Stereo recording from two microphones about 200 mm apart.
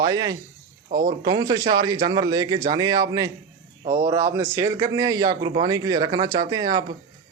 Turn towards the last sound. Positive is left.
turn(degrees=-20)  # may be behind; listen again after turning